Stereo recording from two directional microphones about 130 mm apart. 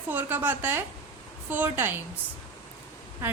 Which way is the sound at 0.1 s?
15° right (ahead or behind).